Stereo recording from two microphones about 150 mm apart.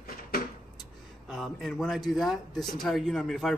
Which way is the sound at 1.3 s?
Centre (ahead or behind).